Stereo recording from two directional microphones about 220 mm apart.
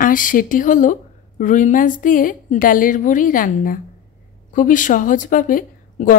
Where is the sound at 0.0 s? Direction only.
40° left (ahead or behind).